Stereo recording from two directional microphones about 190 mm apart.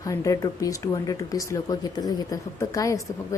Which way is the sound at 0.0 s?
15° left (ahead or behind).